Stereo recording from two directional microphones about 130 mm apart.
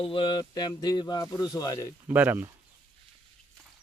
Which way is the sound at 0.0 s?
40° left (ahead or behind).